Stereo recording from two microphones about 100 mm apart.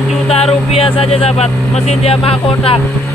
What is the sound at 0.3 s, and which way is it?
Speech, 85° left.